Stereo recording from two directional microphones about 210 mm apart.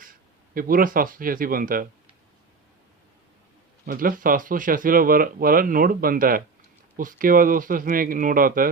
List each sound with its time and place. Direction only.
0.5 s speech: 40° right (ahead or behind)
3.8 s speech: 40° right (ahead or behind)